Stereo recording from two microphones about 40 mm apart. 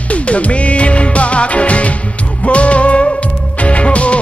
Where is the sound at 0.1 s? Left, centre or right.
Left.